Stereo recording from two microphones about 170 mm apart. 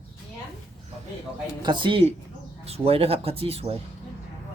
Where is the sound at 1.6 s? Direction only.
30° right (ahead or behind).